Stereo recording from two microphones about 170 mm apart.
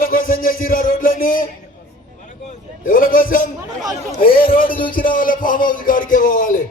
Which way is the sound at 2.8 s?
55° left (ahead or behind).